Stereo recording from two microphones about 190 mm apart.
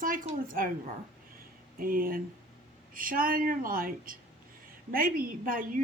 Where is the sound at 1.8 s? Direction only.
50° right (ahead or behind).